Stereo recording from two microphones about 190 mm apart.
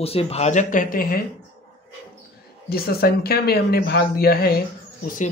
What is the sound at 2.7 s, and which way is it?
Speech, 55° left (ahead or behind).